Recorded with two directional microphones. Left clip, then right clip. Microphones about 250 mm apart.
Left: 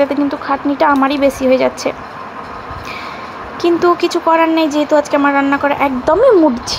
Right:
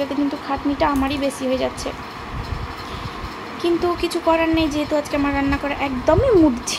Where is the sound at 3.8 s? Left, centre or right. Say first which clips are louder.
Left 7 dB; centre.